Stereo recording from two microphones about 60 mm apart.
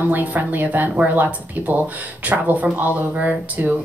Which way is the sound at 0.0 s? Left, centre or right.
Right.